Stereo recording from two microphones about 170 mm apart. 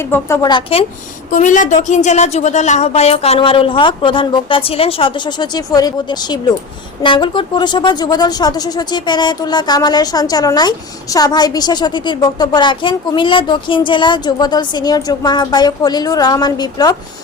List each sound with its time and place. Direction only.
0.0 s a woman's voice: 15° left (ahead or behind)
0.5 s speech: 35° left (ahead or behind)
1.3 s speech: 50° left (ahead or behind); by 16.9 s 25° left (ahead or behind)